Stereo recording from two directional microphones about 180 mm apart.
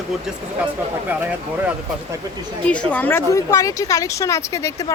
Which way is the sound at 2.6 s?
5° left (ahead or behind).